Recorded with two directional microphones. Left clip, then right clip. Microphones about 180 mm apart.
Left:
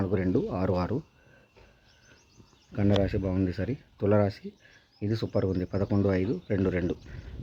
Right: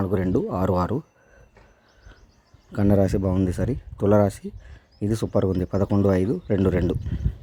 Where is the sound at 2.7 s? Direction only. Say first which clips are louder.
Right 6 dB; 35° right (ahead or behind).